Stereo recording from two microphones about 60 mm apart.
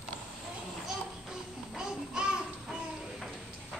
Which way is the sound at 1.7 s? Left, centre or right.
Centre.